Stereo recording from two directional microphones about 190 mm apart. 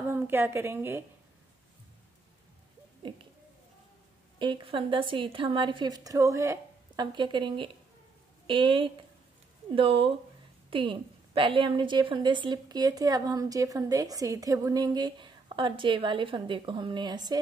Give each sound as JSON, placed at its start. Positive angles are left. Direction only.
{"t": 0.1, "sound": "a woman's voice", "side_deg": -10}
{"t": 3.0, "sound": "a woman's voice", "side_deg": -25}
{"t": 4.4, "sound": "a woman's voice", "side_deg": -25}